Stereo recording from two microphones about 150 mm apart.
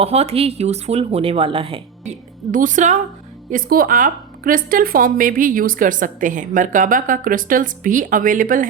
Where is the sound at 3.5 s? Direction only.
70° right (ahead or behind).